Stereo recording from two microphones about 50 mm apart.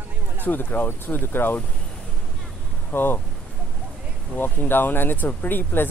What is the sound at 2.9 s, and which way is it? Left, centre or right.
Speech, left.